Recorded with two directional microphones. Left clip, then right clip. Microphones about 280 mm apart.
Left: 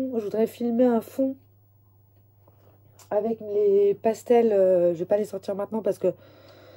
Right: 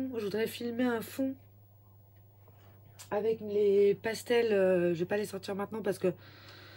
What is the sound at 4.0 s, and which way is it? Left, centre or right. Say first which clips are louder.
Speech: left 9 dB; right.